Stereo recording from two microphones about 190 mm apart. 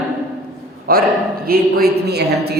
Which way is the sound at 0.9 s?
50° right (ahead or behind).